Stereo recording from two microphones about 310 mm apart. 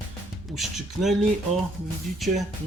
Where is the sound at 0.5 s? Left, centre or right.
Centre.